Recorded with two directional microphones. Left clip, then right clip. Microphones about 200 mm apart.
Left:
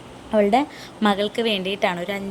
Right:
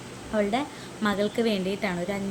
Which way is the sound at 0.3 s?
30° left (ahead or behind).